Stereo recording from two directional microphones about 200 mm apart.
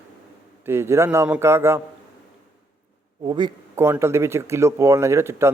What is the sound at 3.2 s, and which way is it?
Speech, 25° right (ahead or behind).